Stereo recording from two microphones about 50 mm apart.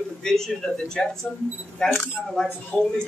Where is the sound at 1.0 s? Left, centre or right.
Centre.